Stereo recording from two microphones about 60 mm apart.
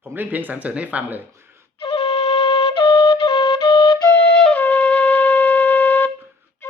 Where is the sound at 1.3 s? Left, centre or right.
Right.